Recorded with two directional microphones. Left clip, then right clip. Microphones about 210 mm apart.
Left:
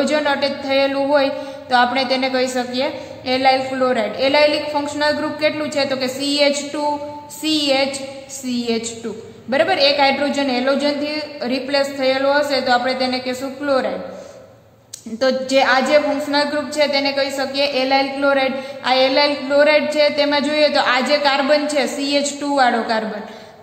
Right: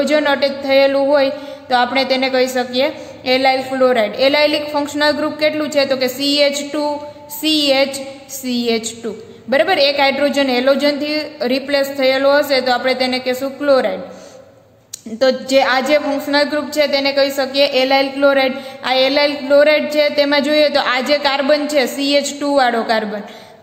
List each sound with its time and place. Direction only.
0.0 s a woman's voice: 25° right (ahead or behind)
15.1 s a woman's voice: 25° right (ahead or behind)